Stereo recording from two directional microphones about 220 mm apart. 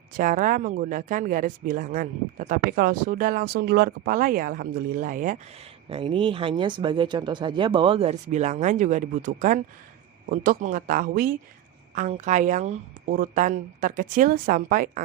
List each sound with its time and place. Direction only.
0.1 s speech: 35° right (ahead or behind)
5.9 s speech: 25° right (ahead or behind); by 11.3 s 40° right (ahead or behind)
11.9 s speech: 30° right (ahead or behind)